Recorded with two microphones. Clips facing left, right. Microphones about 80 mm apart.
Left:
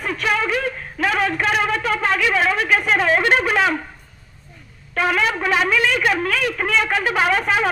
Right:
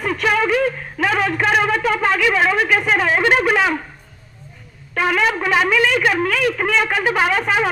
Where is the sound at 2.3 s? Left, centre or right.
Centre.